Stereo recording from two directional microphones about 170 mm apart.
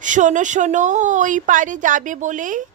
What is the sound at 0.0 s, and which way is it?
Speech, 45° right (ahead or behind).